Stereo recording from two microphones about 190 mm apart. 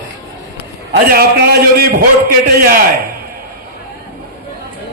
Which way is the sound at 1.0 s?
55° right (ahead or behind).